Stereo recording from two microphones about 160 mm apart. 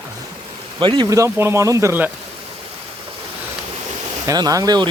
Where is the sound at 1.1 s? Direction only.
20° right (ahead or behind).